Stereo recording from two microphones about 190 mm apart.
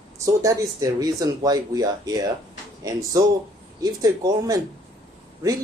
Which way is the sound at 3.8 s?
20° right (ahead or behind).